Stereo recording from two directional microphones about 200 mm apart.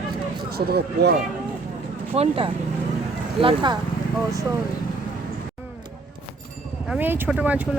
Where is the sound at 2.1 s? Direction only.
25° right (ahead or behind).